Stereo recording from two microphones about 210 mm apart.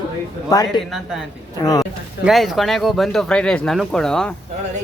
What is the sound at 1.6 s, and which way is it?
Speech, 15° left (ahead or behind).